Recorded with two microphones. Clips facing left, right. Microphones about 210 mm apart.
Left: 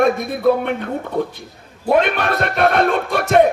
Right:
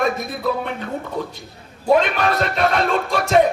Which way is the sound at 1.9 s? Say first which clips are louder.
Left 1 dB; 55° left (ahead or behind).